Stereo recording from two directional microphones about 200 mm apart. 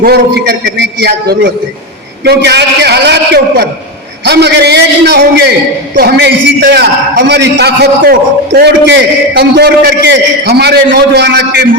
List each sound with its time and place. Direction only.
0.0 s a man's voice: 50° right (ahead or behind)